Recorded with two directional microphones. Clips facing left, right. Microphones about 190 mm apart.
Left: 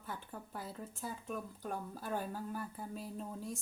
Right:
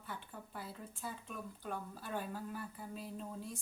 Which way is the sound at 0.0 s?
45° left (ahead or behind).